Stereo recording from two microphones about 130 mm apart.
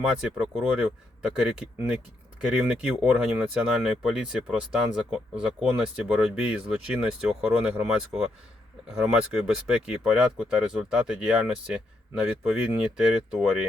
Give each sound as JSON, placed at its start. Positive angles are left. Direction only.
{"t": 0.0, "sound": "speech", "side_deg": -5}